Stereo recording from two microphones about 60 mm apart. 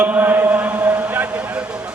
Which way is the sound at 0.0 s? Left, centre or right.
Right.